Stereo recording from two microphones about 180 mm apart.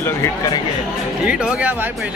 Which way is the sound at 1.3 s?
5° right (ahead or behind).